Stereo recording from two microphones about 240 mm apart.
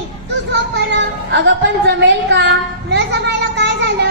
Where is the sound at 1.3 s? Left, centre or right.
Right.